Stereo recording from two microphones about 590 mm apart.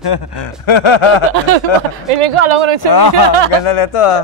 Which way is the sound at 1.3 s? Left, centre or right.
Right.